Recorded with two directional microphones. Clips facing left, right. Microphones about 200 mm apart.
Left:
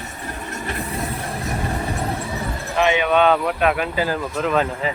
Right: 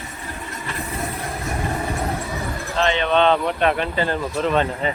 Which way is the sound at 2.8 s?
10° left (ahead or behind).